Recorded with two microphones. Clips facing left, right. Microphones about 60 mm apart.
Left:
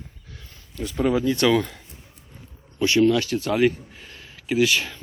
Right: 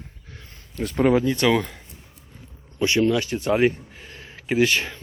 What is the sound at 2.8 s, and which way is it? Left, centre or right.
Speech, right.